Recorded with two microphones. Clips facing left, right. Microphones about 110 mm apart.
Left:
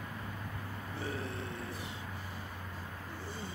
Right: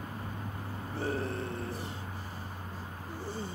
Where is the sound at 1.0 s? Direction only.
40° right (ahead or behind).